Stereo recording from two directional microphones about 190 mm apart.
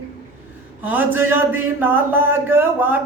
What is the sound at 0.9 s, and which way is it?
Speech, 10° right (ahead or behind).